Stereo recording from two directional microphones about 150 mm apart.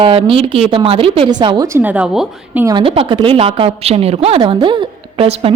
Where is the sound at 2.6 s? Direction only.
30° right (ahead or behind).